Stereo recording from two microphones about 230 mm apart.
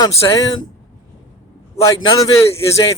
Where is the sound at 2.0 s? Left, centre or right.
Centre.